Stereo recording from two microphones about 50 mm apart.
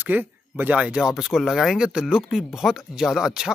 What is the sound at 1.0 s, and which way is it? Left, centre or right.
Speech, centre.